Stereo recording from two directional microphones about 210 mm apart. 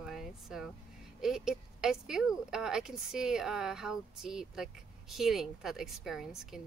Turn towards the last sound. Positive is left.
turn(degrees=0)  # may be behind; listen again after turning